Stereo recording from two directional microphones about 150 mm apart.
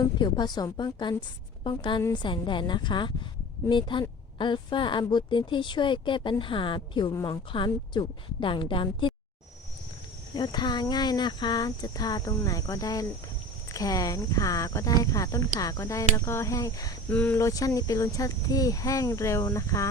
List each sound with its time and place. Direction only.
0.0 s a woman's voice: 30° left (ahead or behind)
10.3 s speech: 30° left (ahead or behind)
17.1 s speech: 10° left (ahead or behind)
17.3 s speech: 20° left (ahead or behind)